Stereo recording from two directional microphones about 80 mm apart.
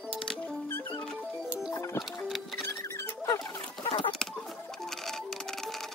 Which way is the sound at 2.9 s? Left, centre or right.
Left.